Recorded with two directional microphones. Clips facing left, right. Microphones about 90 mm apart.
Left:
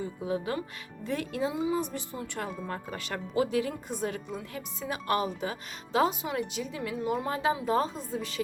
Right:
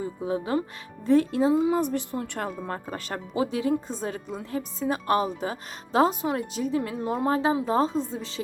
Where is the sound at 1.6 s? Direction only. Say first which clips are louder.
Right 6 dB; 55° right (ahead or behind).